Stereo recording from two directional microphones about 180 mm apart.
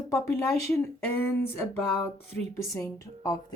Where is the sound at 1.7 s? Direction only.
10° left (ahead or behind).